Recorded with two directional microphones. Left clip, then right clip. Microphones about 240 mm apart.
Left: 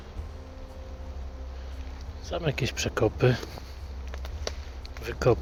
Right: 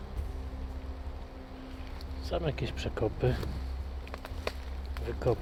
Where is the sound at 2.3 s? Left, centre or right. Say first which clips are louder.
Left 4 dB; centre.